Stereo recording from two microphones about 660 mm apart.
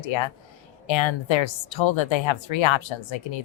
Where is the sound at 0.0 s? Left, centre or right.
Left.